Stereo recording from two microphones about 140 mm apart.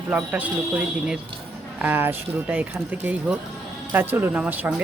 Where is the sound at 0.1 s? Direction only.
10° right (ahead or behind).